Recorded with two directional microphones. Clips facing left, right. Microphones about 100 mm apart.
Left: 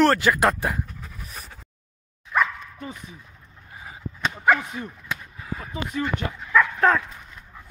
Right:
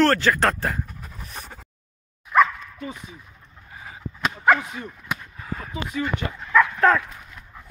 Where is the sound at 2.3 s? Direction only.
20° right (ahead or behind).